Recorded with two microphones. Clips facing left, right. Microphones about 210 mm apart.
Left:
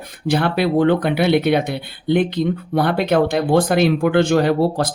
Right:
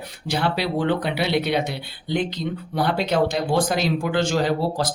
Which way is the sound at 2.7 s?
55° left (ahead or behind).